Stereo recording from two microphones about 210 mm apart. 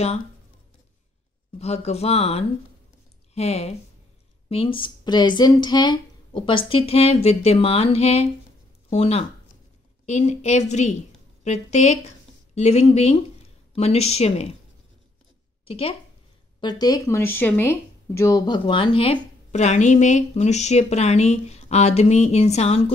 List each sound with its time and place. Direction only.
1.6 s speech: 30° left (ahead or behind)
15.6 s speech: 25° left (ahead or behind)